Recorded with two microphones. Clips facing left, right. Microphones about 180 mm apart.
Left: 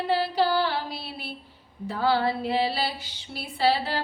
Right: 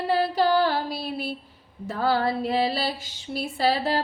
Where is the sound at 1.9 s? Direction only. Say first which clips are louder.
Right 1 dB; 45° right (ahead or behind).